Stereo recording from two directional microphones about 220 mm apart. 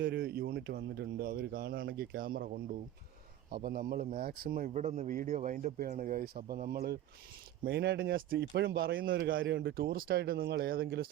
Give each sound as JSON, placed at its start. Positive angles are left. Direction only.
{"t": 0.0, "sound": "a man's voice", "side_deg": -45}
{"t": 3.5, "sound": "a man's voice", "side_deg": -40}
{"t": 9.3, "sound": "speech", "side_deg": -60}